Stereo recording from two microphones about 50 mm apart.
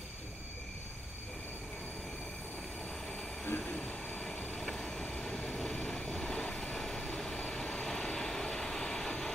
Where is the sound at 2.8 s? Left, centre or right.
Centre.